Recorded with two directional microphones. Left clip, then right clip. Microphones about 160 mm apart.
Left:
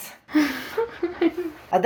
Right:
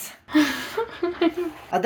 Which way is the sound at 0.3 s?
45° right (ahead or behind).